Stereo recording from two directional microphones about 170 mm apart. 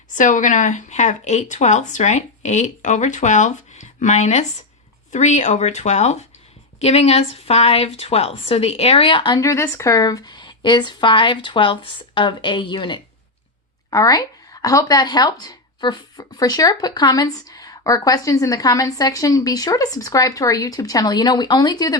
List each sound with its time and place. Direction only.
0.1 s speech: 50° left (ahead or behind); by 21.9 s 25° left (ahead or behind)